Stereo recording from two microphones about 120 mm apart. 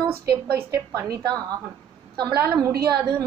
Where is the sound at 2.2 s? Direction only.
35° right (ahead or behind).